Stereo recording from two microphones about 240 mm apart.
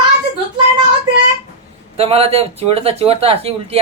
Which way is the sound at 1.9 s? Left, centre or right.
Right.